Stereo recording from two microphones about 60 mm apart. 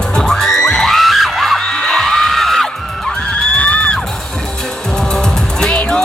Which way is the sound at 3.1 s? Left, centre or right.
Centre.